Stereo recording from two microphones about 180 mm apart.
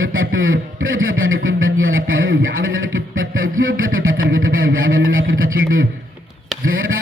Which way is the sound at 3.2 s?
90° right.